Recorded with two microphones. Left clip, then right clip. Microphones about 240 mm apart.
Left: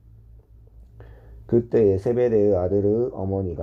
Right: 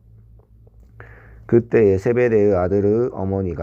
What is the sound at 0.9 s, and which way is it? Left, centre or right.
Speech, right.